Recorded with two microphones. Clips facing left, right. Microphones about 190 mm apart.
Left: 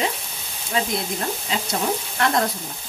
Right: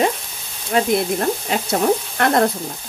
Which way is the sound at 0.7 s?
60° right (ahead or behind).